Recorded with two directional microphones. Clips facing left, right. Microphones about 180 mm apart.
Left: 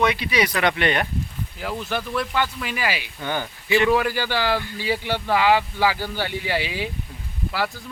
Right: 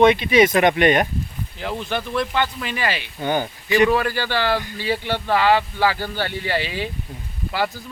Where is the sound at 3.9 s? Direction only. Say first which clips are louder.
Even; 10° left (ahead or behind).